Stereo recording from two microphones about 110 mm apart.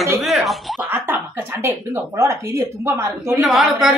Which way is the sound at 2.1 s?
25° right (ahead or behind).